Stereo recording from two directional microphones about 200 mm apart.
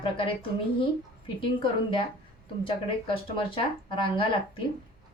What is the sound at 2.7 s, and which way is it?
Speech, 25° left (ahead or behind).